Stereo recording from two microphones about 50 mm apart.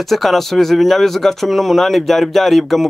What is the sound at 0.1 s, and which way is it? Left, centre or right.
Speech, centre.